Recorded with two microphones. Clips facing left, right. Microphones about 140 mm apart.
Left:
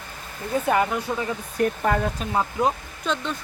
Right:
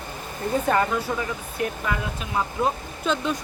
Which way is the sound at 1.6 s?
45° left (ahead or behind).